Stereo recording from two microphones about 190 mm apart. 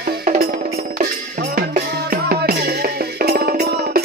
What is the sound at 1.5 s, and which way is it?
Music, 50° right (ahead or behind).